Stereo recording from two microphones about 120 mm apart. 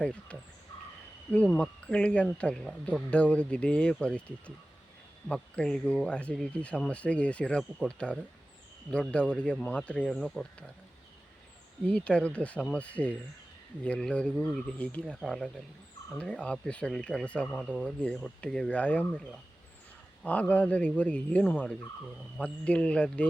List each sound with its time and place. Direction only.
0.0 s speech: 10° left (ahead or behind)
11.9 s speech: 10° left (ahead or behind)
20.2 s speech: 10° left (ahead or behind)